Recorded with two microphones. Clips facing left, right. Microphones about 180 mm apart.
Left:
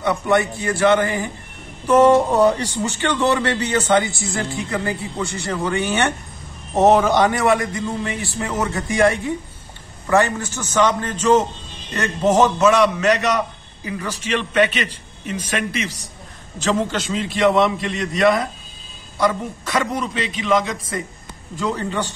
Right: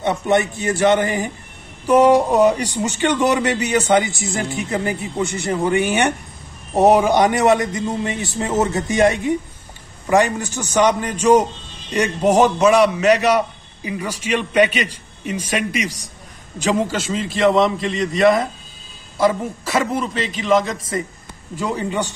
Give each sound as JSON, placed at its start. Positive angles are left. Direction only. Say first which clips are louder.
{"t": 0.0, "sound": "a man's voice", "louder": "right 1 dB", "side_deg": -20}